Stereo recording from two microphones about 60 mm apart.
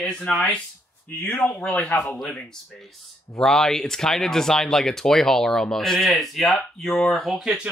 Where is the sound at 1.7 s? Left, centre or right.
Centre.